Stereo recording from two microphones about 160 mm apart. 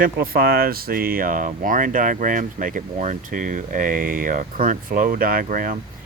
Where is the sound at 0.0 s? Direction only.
70° right (ahead or behind).